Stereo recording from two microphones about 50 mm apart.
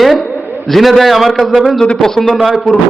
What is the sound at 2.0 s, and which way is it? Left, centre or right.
Speech, centre.